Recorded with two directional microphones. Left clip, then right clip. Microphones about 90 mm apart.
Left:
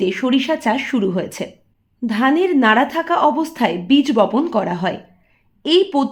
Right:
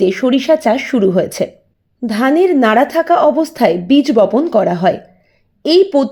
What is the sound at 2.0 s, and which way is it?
A woman's voice, 45° right (ahead or behind).